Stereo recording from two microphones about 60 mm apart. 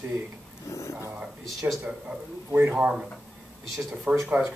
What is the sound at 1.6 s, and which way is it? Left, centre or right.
Speech, right.